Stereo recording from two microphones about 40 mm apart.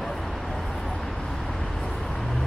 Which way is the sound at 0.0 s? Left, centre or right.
Centre.